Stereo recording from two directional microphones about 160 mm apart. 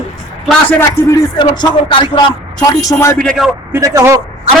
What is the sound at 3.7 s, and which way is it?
Speech, 20° right (ahead or behind).